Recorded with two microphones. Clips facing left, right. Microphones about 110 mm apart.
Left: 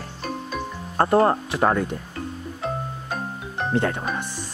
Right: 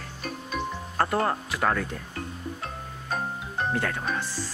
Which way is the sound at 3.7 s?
25° left (ahead or behind).